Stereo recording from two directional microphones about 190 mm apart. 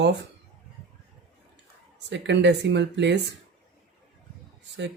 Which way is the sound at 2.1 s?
70° right (ahead or behind).